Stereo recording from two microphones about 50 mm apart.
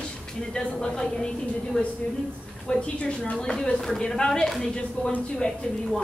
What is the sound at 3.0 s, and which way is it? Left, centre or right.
Speech, centre.